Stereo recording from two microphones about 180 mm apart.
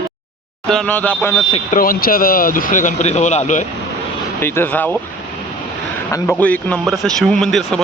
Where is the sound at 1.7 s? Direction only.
55° left (ahead or behind).